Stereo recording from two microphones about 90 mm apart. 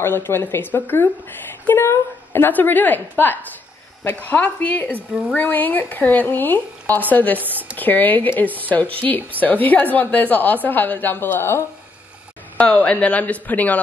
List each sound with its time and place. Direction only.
0.0 s a woman's voice: 25° left (ahead or behind)
7.3 s speech: 20° right (ahead or behind)
7.7 s a woman's voice: 20° left (ahead or behind)
12.5 s speech: 15° left (ahead or behind)